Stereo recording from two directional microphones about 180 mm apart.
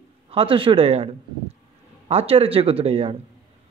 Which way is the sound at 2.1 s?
35° right (ahead or behind).